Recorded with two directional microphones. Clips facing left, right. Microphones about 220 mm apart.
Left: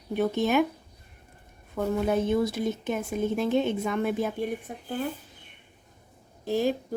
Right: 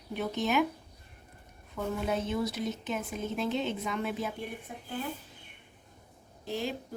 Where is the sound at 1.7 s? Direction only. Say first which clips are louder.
Left 6 dB; 55° left (ahead or behind).